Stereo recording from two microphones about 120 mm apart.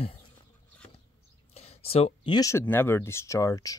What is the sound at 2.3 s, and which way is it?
Speech, 25° left (ahead or behind).